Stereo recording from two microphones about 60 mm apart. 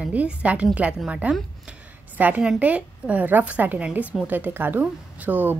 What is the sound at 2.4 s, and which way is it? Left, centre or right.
A woman's voice, right.